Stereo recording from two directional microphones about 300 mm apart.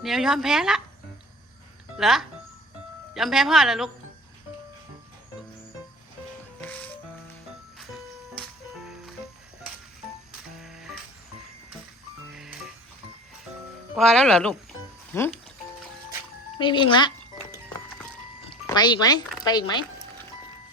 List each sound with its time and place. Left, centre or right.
0.0 s speech: centre
2.0 s speech: centre
6.6 s music: centre
10.6 s music: centre
12.3 s music: centre
13.9 s speech: centre
16.6 s speech: centre
18.6 s speech: centre